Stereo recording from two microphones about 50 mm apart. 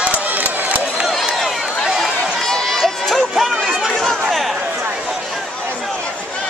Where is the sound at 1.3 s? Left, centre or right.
Centre.